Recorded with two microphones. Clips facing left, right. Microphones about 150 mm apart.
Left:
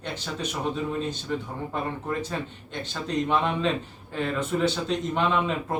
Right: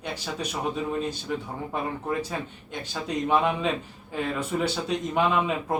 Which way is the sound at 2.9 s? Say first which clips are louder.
Right 1 dB; 10° right (ahead or behind).